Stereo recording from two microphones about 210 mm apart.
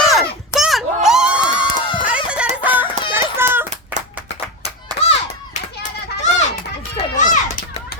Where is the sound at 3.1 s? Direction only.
10° right (ahead or behind).